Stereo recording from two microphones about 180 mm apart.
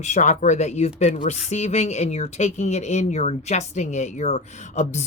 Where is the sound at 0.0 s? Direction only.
40° left (ahead or behind).